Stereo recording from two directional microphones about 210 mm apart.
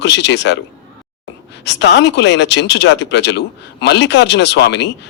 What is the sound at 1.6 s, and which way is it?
A man's voice, 55° left (ahead or behind).